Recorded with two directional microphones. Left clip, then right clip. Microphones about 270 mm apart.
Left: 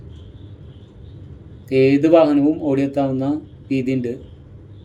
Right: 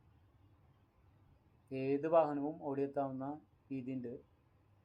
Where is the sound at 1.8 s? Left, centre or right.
Centre.